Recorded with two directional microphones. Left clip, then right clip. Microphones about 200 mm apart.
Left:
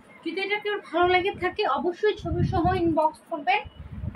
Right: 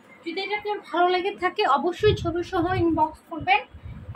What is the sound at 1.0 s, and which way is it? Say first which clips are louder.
Speech: even; 5° left (ahead or behind).